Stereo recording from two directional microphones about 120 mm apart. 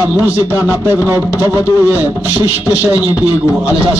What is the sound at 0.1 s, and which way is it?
A man's voice, 15° right (ahead or behind).